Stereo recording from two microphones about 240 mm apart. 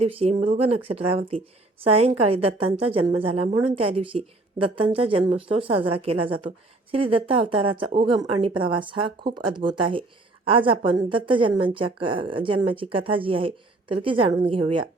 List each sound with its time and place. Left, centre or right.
0.0 s speech: right